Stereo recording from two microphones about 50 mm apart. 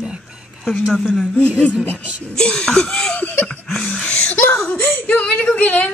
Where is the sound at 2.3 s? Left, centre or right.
Centre.